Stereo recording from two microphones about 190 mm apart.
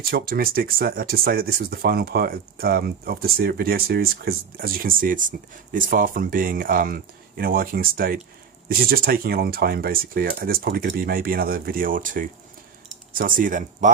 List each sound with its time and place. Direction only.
0.1 s speech: 50° right (ahead or behind)